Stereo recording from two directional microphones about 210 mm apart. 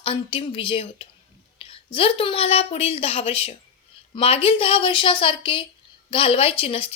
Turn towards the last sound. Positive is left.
turn(degrees=25)  # may be behind; listen again after turning